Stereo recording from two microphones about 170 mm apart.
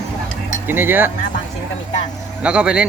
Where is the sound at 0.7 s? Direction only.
10° right (ahead or behind).